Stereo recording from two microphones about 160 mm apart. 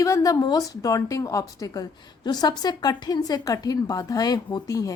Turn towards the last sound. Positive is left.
turn(degrees=20)  # may be behind; listen again after turning